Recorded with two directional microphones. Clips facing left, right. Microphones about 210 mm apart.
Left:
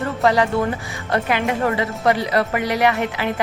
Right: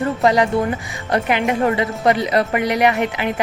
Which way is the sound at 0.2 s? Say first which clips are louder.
Even; 15° right (ahead or behind).